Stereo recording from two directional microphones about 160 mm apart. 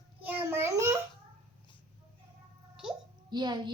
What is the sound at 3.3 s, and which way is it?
Speech, 25° right (ahead or behind).